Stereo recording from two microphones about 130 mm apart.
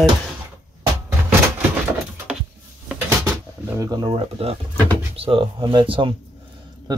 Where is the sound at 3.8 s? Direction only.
30° right (ahead or behind).